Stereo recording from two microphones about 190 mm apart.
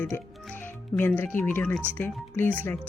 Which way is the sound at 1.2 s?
10° left (ahead or behind).